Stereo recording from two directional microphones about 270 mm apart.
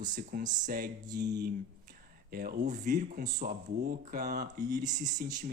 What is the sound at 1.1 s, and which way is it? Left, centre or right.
Mantra, centre.